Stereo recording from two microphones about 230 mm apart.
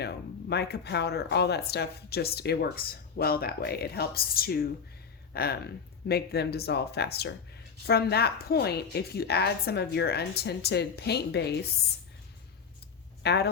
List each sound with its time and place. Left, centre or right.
0.0 s speech: left
13.2 s speech: left